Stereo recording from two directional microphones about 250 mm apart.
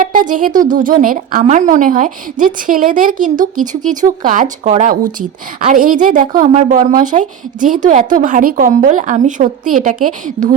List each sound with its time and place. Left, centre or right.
0.0 s a woman's voice: right